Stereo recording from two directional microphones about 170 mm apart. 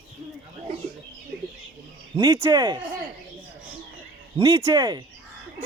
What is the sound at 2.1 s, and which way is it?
Speech, 20° right (ahead or behind).